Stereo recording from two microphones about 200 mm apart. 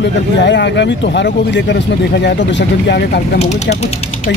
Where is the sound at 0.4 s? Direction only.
60° left (ahead or behind).